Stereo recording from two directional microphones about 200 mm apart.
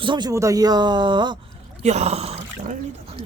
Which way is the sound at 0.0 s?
20° right (ahead or behind).